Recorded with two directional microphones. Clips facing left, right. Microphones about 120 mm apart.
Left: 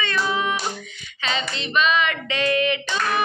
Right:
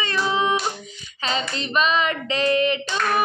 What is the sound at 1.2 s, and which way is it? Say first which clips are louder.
Child singing: right 1 dB; 40° right (ahead or behind).